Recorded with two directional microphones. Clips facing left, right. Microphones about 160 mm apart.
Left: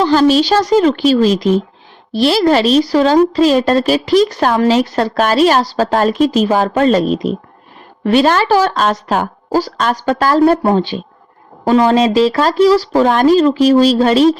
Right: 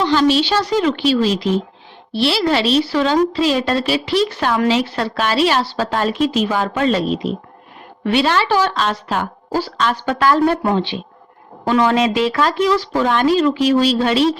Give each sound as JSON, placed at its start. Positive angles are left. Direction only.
{"t": 0.0, "sound": "a woman's voice", "side_deg": 40}